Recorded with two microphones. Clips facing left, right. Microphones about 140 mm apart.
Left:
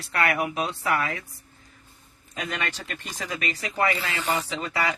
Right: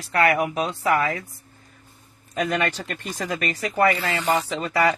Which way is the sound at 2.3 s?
45° right (ahead or behind).